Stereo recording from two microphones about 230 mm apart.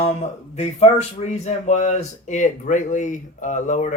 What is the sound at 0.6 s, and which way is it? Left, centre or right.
Speech, left.